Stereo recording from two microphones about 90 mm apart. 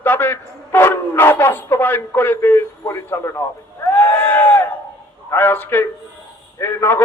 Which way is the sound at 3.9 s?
15° left (ahead or behind).